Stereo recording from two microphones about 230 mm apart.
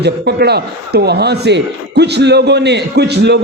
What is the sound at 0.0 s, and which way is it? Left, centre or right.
A man's voice, right.